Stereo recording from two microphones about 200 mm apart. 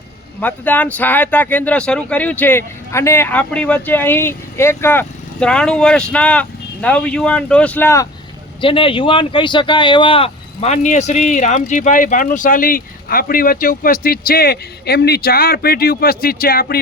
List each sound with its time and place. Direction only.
0.3 s speech: 10° left (ahead or behind)
8.6 s speech: 25° left (ahead or behind); by 16.8 s 50° left (ahead or behind)